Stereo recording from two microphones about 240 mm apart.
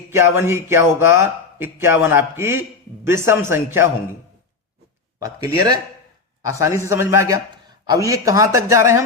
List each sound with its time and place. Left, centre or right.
0.1 s speech: centre
5.2 s speech: centre